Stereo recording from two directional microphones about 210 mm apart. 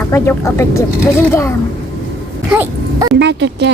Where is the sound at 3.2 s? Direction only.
60° right (ahead or behind).